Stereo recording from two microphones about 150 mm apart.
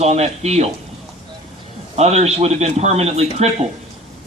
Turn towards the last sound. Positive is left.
turn(degrees=-45)  # may be behind; listen again after turning